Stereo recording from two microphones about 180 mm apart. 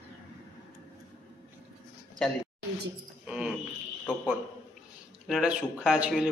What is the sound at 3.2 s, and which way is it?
Speech, 5° right (ahead or behind).